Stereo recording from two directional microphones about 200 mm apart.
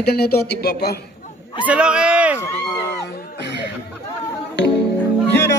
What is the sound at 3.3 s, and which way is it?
Speech, 55° left (ahead or behind).